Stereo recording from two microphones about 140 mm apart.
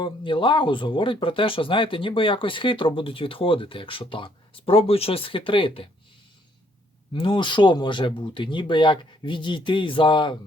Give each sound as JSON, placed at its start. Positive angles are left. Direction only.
{"t": 0.0, "sound": "speech", "side_deg": 35}
{"t": 7.1, "sound": "speech", "side_deg": 35}